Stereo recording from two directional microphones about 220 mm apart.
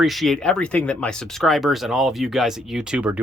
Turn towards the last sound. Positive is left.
turn(degrees=-5)  # may be behind; listen again after turning